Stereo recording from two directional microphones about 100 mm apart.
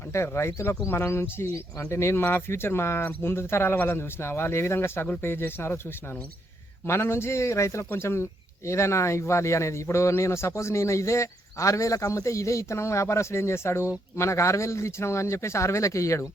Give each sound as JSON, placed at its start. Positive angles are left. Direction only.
{"t": 0.1, "sound": "a man's voice", "side_deg": 25}
{"t": 6.8, "sound": "a man's voice", "side_deg": 25}